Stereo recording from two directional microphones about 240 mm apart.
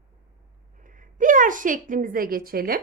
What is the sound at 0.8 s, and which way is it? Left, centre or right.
A woman's voice, right.